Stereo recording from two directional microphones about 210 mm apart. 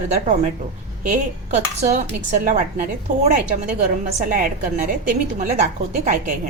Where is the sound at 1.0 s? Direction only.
40° right (ahead or behind).